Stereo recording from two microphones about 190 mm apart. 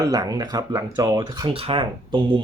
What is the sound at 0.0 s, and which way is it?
Speech, 20° right (ahead or behind).